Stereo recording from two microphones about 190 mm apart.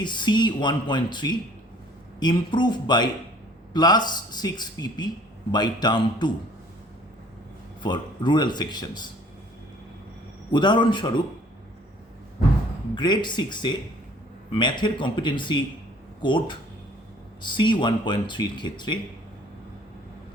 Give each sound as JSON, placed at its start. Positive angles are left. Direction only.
{"t": 0.0, "sound": "a man's voice", "side_deg": 25}
{"t": 7.8, "sound": "a man's voice", "side_deg": 25}
{"t": 10.5, "sound": "a man's voice", "side_deg": 25}
{"t": 13.0, "sound": "a man's voice", "side_deg": 25}